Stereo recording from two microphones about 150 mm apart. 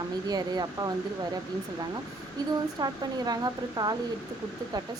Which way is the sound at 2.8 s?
25° right (ahead or behind).